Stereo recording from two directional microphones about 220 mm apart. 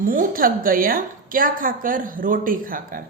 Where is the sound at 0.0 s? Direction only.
40° right (ahead or behind).